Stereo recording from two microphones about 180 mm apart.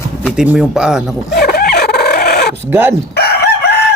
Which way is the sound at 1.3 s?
55° left (ahead or behind).